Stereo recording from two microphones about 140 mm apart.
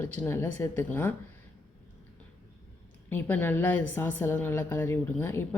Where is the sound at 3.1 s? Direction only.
15° left (ahead or behind).